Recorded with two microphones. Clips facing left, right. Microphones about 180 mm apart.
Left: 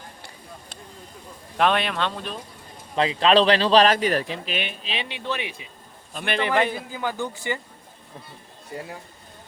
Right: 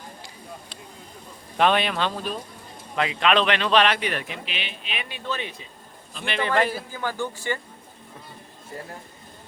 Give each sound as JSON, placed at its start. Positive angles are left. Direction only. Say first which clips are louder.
{"t": 1.5, "sound": "speech", "louder": "right 1 dB", "side_deg": 0}
{"t": 2.9, "sound": "speech", "louder": "left 3 dB", "side_deg": 30}
{"t": 4.9, "sound": "speech", "louder": "right 1 dB", "side_deg": 25}
{"t": 6.1, "sound": "a man's voice", "louder": "left 3 dB", "side_deg": 50}
{"t": 6.7, "sound": "speech", "louder": "left 1 dB", "side_deg": 15}